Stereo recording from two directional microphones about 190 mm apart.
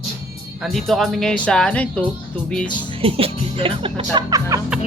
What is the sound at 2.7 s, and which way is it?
Music, 25° left (ahead or behind).